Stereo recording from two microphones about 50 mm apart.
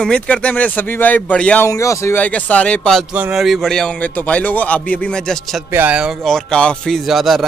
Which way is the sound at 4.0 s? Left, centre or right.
Left.